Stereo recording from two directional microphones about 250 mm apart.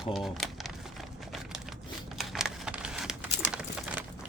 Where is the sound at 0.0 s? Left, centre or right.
Centre.